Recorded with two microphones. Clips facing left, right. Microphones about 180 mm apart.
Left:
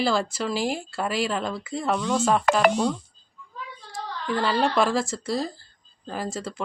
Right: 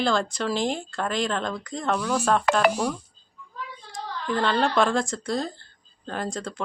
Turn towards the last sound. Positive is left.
turn(degrees=5)  # may be behind; listen again after turning